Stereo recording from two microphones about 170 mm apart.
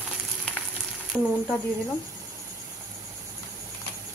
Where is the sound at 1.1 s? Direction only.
10° left (ahead or behind).